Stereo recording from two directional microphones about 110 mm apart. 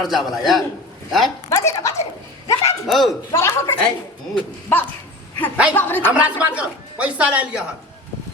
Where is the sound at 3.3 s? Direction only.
25° left (ahead or behind).